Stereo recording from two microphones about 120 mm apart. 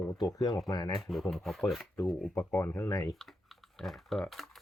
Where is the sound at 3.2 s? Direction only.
Centre (ahead or behind).